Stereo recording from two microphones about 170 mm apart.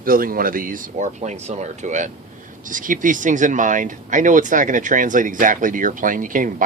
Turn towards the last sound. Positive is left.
turn(degrees=-50)  # may be behind; listen again after turning